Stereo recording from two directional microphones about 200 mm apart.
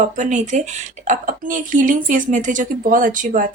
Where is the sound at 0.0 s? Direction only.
40° right (ahead or behind).